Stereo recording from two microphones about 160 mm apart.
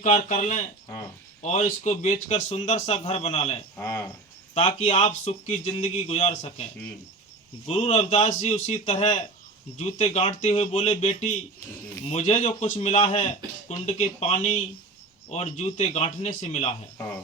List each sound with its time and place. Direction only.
0.0 s a man's voice: 50° left (ahead or behind)
3.8 s cricket: 15° left (ahead or behind)
4.5 s speech: 40° left (ahead or behind)
7.7 s a man's voice: 45° left (ahead or behind)